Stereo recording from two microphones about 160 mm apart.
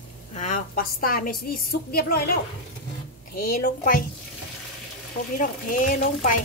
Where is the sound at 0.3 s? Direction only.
50° left (ahead or behind); by 2.3 s 70° left (ahead or behind).